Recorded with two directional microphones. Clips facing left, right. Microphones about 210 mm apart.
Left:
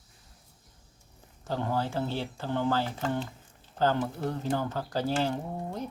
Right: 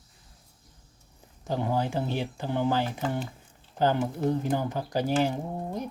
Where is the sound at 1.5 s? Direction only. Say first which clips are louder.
Right 2 dB; 15° right (ahead or behind).